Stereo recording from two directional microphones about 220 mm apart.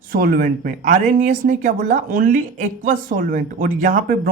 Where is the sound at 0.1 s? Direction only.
40° right (ahead or behind).